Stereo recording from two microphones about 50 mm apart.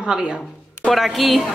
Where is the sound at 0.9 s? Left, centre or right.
Centre.